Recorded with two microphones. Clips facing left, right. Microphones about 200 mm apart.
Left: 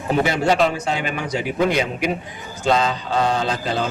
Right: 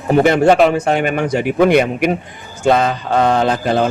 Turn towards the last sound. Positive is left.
turn(degrees=-55)  # may be behind; listen again after turning